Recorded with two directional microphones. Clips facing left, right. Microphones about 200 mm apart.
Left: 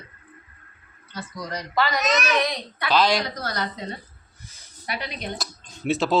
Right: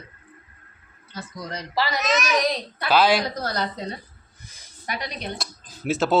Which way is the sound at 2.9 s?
5° right (ahead or behind).